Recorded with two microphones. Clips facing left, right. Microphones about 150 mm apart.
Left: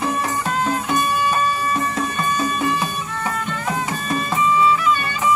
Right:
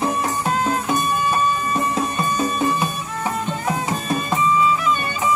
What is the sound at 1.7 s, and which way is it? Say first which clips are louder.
Music: right 1 dB; 35° right (ahead or behind).